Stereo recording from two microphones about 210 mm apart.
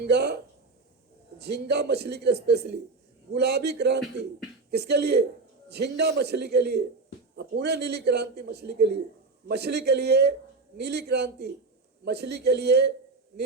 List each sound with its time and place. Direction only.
0.1 s a man's voice: 50° right (ahead or behind)
1.4 s a man's voice: 50° right (ahead or behind)